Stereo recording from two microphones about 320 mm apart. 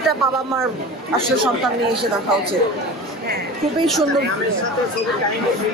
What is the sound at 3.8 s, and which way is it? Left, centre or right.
Speech, centre.